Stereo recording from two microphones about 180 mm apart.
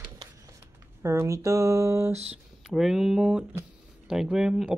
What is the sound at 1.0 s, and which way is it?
Speech, 15° right (ahead or behind).